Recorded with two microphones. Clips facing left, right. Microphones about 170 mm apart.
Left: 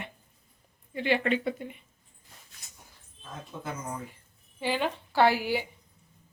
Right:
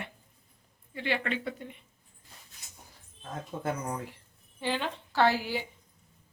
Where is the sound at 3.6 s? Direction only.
70° right (ahead or behind).